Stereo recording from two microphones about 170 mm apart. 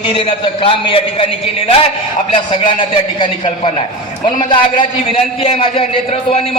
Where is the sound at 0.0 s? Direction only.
30° left (ahead or behind).